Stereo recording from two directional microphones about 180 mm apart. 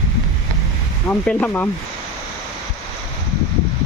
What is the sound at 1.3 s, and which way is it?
Speech, 10° left (ahead or behind).